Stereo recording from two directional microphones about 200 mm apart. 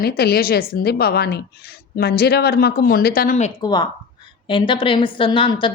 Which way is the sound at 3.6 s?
20° left (ahead or behind).